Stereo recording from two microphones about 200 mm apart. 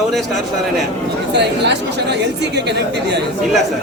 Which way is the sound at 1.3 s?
60° right (ahead or behind).